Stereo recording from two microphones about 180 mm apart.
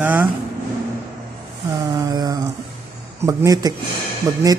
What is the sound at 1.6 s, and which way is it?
Mantra, 20° right (ahead or behind).